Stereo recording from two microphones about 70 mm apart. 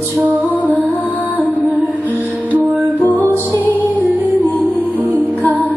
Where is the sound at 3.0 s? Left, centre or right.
Left.